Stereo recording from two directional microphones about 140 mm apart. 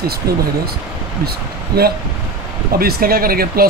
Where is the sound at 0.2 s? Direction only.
90° right.